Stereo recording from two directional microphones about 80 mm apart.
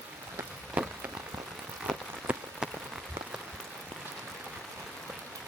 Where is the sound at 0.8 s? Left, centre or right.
Centre.